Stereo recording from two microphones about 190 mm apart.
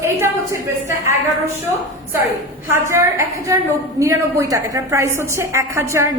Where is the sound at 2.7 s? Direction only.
15° right (ahead or behind).